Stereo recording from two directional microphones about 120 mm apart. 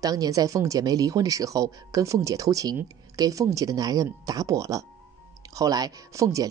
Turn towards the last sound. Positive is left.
turn(degrees=-25)  # may be behind; listen again after turning